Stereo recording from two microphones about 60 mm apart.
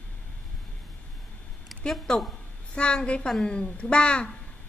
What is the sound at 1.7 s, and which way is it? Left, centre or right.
A woman's voice, centre.